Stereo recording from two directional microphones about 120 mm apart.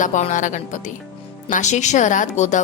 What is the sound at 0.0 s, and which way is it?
A woman's voice, 90° left.